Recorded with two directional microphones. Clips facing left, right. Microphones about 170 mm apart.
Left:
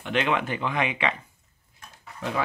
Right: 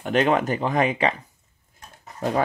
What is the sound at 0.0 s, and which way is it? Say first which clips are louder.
Speech: right 5 dB; 40° right (ahead or behind).